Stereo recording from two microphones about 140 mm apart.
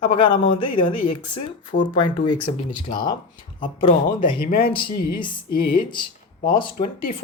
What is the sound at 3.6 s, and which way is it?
Speech, 40° left (ahead or behind).